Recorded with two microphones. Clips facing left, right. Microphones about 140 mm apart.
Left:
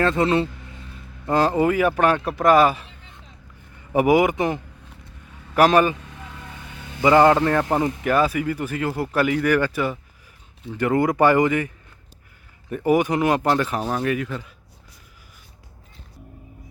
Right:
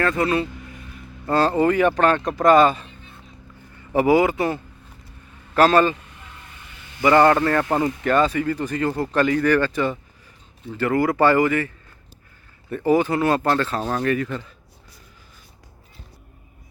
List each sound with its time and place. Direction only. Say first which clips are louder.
0.0 s speech: left 2 dB; 25° left (ahead or behind)
1.3 s speech: right 1 dB; 15° left (ahead or behind)
3.9 s speech: even; 15° left (ahead or behind)
7.0 s speech: even; 15° left (ahead or behind)
10.8 s speech: even; 20° left (ahead or behind)
12.7 s speech: even; 15° left (ahead or behind)